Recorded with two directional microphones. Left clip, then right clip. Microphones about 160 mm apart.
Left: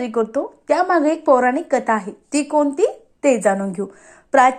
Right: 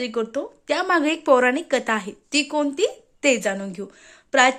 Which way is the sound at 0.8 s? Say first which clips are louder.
Left 2 dB; 45° right (ahead or behind).